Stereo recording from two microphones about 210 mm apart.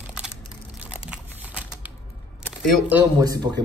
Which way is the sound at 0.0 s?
5° right (ahead or behind).